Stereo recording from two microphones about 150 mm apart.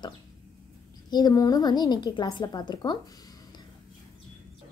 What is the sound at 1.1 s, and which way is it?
A woman's voice, 25° left (ahead or behind).